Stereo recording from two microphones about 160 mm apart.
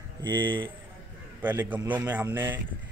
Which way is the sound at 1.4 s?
10° right (ahead or behind).